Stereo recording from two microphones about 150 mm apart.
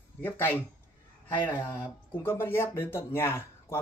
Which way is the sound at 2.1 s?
15° left (ahead or behind).